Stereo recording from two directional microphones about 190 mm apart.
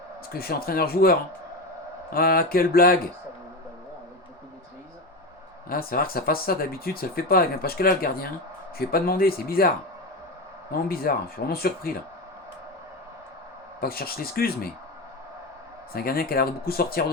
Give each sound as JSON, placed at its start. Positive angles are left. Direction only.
{"t": 0.3, "sound": "speech", "side_deg": 50}
{"t": 2.1, "sound": "speech", "side_deg": 50}
{"t": 5.6, "sound": "speech", "side_deg": 50}
{"t": 13.8, "sound": "speech", "side_deg": 50}
{"t": 15.9, "sound": "speech", "side_deg": 50}